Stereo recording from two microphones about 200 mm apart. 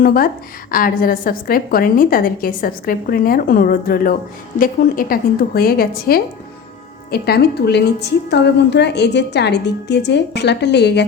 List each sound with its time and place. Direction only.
0.0 s a woman's voice: 45° left (ahead or behind)